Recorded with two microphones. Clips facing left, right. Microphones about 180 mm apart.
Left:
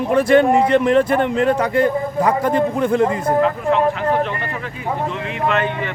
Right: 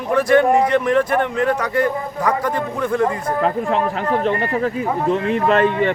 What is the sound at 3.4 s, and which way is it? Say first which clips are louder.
Speech: left 2 dB; 35° right (ahead or behind).